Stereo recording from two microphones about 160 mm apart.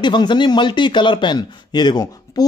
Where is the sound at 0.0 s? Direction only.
30° left (ahead or behind).